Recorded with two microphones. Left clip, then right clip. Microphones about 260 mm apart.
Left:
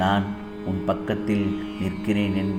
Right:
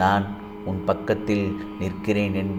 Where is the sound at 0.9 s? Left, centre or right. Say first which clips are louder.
Right 3 dB; centre.